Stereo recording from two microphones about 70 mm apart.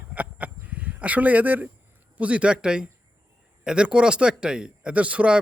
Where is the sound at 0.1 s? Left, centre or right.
Right.